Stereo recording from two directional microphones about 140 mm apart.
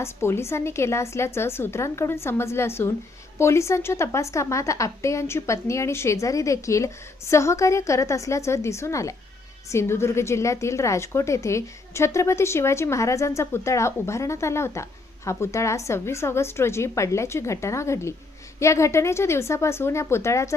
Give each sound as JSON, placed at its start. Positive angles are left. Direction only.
{"t": 0.0, "sound": "a woman's voice", "side_deg": 20}